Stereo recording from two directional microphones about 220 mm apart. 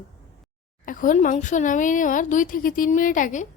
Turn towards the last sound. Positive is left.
turn(degrees=35)  # may be behind; listen again after turning